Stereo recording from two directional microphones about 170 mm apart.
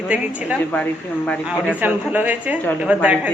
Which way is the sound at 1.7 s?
10° right (ahead or behind).